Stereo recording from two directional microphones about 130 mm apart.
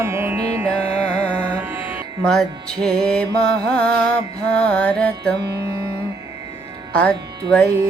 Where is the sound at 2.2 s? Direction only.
5° left (ahead or behind).